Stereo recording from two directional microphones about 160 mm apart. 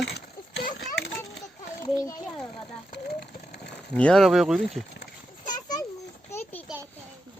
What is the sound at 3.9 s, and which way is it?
Speech, 5° left (ahead or behind).